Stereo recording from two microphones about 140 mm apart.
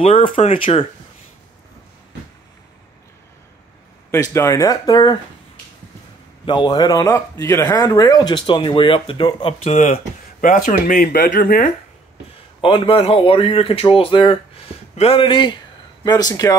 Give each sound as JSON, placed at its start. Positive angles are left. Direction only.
{"t": 0.0, "sound": "speech", "side_deg": 45}
{"t": 4.1, "sound": "speech", "side_deg": 20}
{"t": 6.4, "sound": "speech", "side_deg": 35}
{"t": 9.6, "sound": "speech", "side_deg": 60}
{"t": 12.6, "sound": "speech", "side_deg": 40}